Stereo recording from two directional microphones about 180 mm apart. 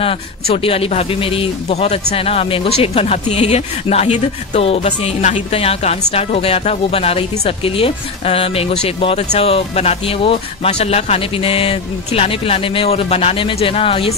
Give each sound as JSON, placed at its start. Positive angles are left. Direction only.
{"t": 0.0, "sound": "speech", "side_deg": 30}